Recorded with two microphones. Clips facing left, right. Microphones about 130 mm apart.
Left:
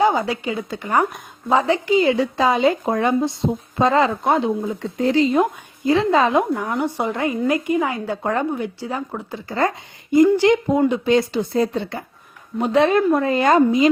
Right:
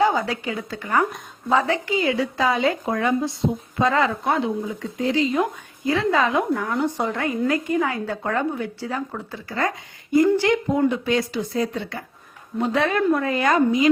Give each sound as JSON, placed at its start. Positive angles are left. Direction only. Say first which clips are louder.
{"t": 0.0, "sound": "speech", "louder": "left 2 dB", "side_deg": 20}
{"t": 4.6, "sound": "a woman's voice", "louder": "left 4 dB", "side_deg": 40}